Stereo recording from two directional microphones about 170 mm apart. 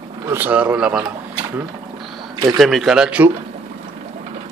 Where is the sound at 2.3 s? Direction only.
25° right (ahead or behind).